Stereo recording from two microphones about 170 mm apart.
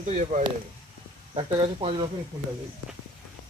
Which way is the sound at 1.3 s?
35° right (ahead or behind).